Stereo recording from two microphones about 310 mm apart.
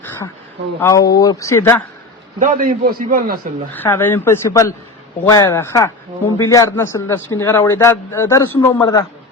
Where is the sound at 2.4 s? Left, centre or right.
Right.